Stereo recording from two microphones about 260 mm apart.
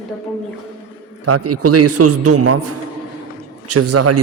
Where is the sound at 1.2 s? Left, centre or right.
Right.